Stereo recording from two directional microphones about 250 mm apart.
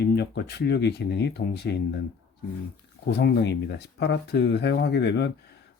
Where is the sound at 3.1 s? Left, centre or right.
Left.